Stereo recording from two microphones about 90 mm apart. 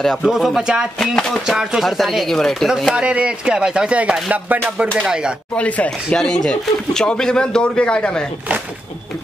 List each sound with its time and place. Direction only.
0.2 s speech: 5° right (ahead or behind)
0.9 s chopping: 5° left (ahead or behind)
1.5 s speech: 5° right (ahead or behind)
5.6 s speech: 15° left (ahead or behind)